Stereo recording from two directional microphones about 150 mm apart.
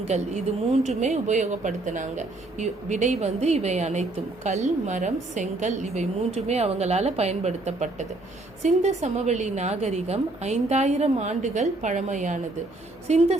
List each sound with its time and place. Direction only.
0.1 s a woman's voice: 50° right (ahead or behind)